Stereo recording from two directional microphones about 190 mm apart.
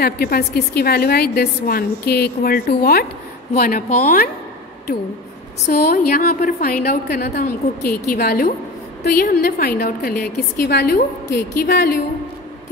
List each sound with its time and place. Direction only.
0.0 s a woman's voice: 55° left (ahead or behind)
5.7 s a woman's voice: 55° left (ahead or behind)